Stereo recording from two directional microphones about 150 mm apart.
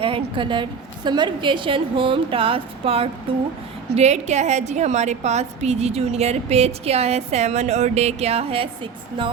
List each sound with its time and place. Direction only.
0.0 s a woman's voice: 35° right (ahead or behind)